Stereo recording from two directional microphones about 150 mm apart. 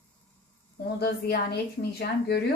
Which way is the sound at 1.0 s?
90° left.